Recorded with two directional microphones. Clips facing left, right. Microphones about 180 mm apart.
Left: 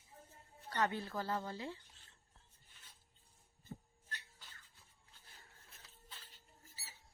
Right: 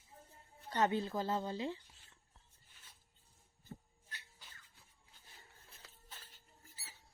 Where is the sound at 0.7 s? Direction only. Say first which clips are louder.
Right 4 dB; 20° right (ahead or behind).